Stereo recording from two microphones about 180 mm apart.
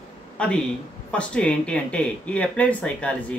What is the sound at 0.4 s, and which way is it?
Speech, 5° left (ahead or behind).